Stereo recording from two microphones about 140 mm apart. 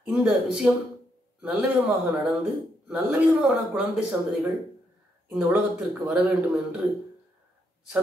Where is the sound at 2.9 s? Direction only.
10° right (ahead or behind).